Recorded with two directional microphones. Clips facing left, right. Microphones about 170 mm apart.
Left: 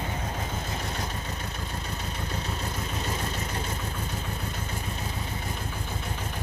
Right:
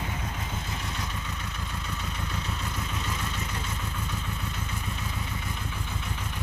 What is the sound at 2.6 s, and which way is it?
Vehicle, 40° left (ahead or behind).